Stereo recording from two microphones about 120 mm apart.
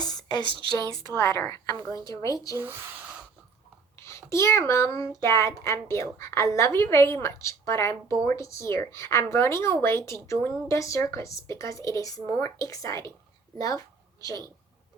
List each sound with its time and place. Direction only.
0.0 s a sound: 35° left (ahead or behind)
1.1 s a woman's voice: 25° left (ahead or behind)
4.0 s a woman's voice: 25° left (ahead or behind)